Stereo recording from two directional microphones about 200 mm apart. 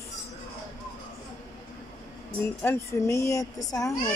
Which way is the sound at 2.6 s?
15° left (ahead or behind).